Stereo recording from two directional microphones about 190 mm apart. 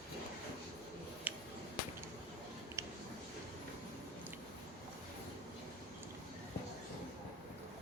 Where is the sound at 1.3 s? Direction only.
10° right (ahead or behind).